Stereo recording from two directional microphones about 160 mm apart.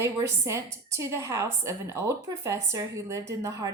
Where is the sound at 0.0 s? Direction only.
15° right (ahead or behind).